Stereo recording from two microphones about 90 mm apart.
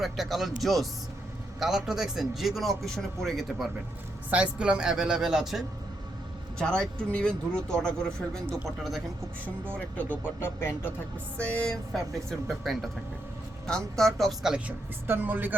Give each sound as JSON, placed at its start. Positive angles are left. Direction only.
{"t": 0.0, "sound": "speech", "side_deg": 0}
{"t": 4.5, "sound": "speech", "side_deg": -10}
{"t": 6.6, "sound": "speech", "side_deg": 10}
{"t": 9.7, "sound": "speech", "side_deg": 15}
{"t": 11.3, "sound": "speech", "side_deg": 15}
{"t": 15.0, "sound": "speech", "side_deg": -25}